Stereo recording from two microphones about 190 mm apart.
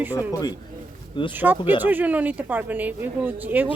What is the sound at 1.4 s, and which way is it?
Speech, 10° right (ahead or behind).